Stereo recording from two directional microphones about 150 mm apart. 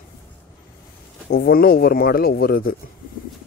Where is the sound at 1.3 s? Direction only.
85° left.